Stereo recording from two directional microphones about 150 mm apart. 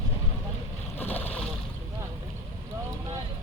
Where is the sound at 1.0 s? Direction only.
10° left (ahead or behind).